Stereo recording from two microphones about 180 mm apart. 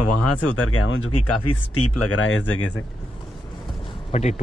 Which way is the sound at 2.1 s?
90° left.